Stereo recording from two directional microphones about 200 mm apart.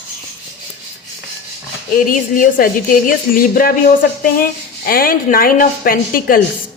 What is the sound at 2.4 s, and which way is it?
A woman's voice, 40° left (ahead or behind).